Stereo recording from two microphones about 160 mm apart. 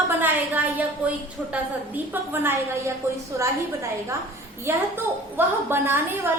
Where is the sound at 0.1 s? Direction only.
10° right (ahead or behind).